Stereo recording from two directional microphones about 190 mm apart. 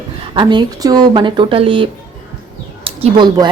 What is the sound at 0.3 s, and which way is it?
A woman's voice, 20° right (ahead or behind).